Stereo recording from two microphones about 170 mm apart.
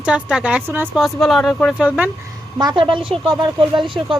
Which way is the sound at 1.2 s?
Centre (ahead or behind).